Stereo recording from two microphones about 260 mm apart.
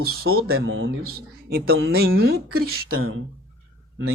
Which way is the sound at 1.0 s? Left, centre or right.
Right.